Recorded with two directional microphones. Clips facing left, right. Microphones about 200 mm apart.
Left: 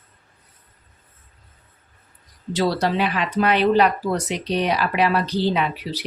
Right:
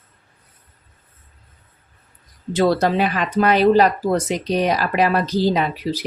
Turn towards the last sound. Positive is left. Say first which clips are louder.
# right 3 dB
turn(degrees=-45)  # may be behind; listen again after turning